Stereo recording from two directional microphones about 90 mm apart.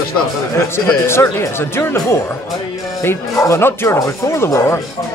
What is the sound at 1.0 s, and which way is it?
Speech, 30° left (ahead or behind).